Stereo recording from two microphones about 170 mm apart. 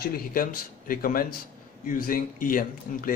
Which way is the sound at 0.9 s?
60° left (ahead or behind).